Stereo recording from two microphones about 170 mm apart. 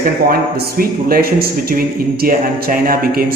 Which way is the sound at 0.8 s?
60° right (ahead or behind).